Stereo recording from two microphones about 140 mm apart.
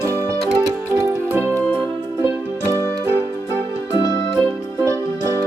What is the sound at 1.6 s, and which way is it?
Music, 5° left (ahead or behind).